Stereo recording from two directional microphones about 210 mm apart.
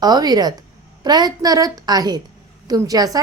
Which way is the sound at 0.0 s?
20° right (ahead or behind).